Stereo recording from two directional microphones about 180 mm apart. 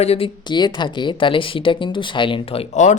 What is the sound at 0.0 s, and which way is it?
Speech, 35° left (ahead or behind).